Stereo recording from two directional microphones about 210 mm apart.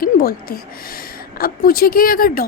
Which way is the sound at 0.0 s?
45° left (ahead or behind).